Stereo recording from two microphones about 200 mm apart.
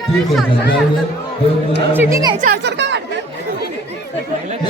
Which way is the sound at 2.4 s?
55° right (ahead or behind).